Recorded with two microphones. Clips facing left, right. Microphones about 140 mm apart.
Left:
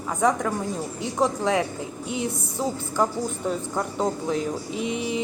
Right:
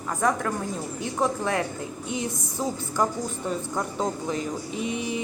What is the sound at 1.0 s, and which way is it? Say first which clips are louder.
Music: left 2 dB; 15° left (ahead or behind).